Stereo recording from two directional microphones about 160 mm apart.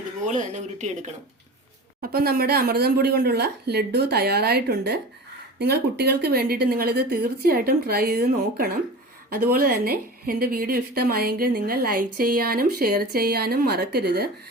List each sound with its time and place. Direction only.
0.3 s speech: 50° right (ahead or behind)
2.0 s a woman's voice: 70° right (ahead or behind); by 14.3 s 90° right